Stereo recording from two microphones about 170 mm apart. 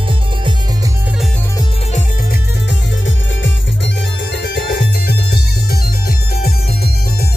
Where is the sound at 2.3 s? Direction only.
90° left; by 7.3 s 65° left (ahead or behind).